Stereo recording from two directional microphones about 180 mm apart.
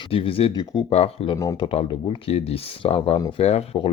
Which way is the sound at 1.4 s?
20° left (ahead or behind).